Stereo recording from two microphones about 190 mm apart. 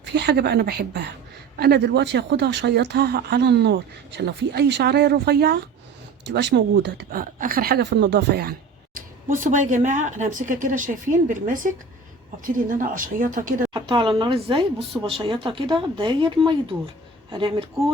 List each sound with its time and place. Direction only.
0.0 s speech: 65° right (ahead or behind)
9.0 s speech: 45° right (ahead or behind)
13.7 s speech: 25° right (ahead or behind)